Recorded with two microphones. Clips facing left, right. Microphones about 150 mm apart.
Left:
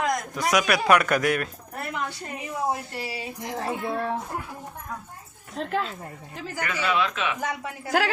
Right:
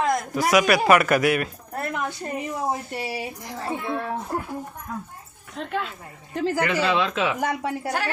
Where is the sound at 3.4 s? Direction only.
20° left (ahead or behind).